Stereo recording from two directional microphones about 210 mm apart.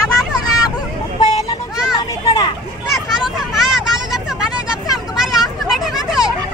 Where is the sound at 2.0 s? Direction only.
20° left (ahead or behind).